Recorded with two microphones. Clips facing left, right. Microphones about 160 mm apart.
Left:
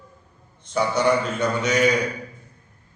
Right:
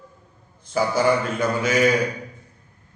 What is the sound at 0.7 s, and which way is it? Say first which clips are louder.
A man's voice: right 1 dB; 5° right (ahead or behind).